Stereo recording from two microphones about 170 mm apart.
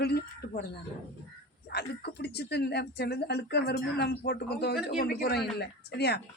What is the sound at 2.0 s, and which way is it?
Speech, 70° left (ahead or behind).